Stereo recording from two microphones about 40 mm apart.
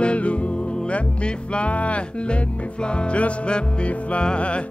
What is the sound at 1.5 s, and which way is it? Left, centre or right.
Music, left.